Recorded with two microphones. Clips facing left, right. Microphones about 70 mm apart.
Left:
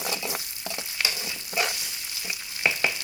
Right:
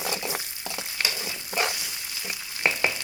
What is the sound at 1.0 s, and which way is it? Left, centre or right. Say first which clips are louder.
Frying: even; right.